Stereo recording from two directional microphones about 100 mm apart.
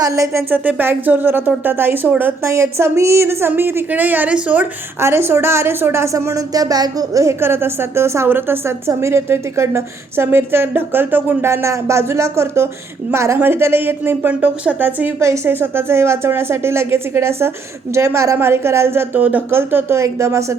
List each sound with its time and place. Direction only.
0.0 s speech: 30° right (ahead or behind)
0.5 s a woman's voice: 15° right (ahead or behind)